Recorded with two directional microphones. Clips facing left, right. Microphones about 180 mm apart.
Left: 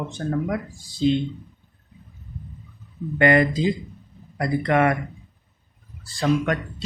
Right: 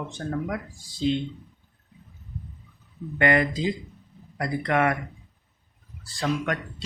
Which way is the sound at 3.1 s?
30° left (ahead or behind).